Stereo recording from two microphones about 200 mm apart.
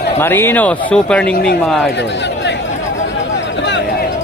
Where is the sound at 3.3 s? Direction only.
60° left (ahead or behind).